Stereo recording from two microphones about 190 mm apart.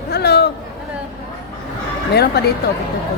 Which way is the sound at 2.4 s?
60° left (ahead or behind).